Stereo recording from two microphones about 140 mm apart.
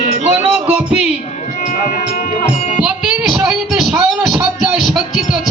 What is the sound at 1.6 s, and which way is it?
Music, 65° left (ahead or behind).